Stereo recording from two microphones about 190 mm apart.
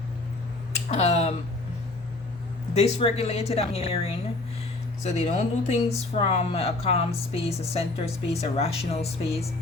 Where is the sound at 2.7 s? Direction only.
30° left (ahead or behind).